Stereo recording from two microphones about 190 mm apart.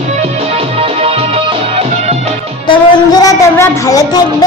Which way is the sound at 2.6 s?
20° left (ahead or behind).